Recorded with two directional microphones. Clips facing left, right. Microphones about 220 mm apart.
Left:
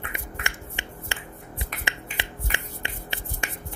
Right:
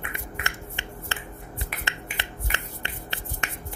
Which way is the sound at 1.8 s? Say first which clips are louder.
Left 1 dB; 15° left (ahead or behind).